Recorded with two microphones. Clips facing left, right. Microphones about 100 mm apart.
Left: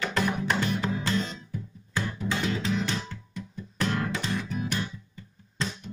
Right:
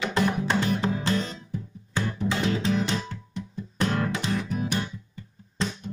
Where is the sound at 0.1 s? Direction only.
25° right (ahead or behind).